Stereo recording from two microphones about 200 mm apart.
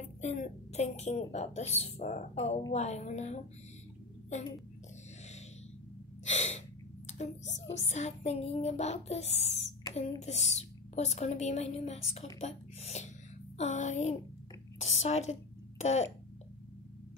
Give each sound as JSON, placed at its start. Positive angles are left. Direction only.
{"t": 0.2, "sound": "a woman's voice", "side_deg": 35}
{"t": 6.2, "sound": "gasp", "side_deg": 35}
{"t": 7.1, "sound": "a woman's voice", "side_deg": 35}
{"t": 15.8, "sound": "a sound", "side_deg": 35}